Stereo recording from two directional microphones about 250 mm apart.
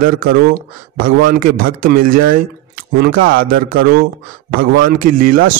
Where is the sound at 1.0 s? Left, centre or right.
Right.